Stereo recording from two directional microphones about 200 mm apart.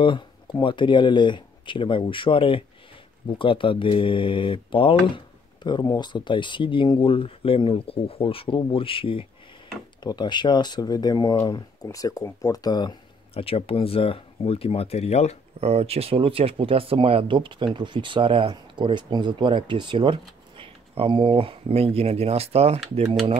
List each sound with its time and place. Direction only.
0.0 s speech: 25° left (ahead or behind)
15.6 s speech: 30° right (ahead or behind)